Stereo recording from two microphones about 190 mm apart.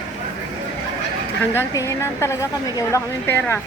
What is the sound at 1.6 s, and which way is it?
A woman's voice, 15° left (ahead or behind).